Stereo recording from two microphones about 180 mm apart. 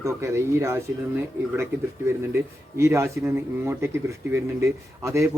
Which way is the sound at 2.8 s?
15° right (ahead or behind).